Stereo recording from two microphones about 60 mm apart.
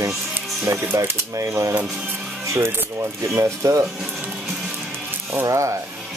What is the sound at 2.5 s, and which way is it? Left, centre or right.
Speech, right.